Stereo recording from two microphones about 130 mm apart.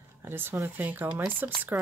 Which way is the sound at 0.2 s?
15° right (ahead or behind).